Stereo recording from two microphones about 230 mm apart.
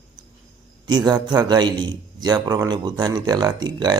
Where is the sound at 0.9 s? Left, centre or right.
Centre.